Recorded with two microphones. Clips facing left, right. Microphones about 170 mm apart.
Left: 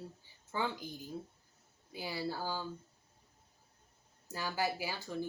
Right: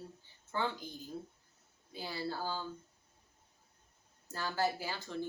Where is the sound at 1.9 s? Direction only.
10° left (ahead or behind).